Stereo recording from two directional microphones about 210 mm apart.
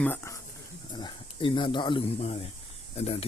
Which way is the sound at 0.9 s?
20° left (ahead or behind).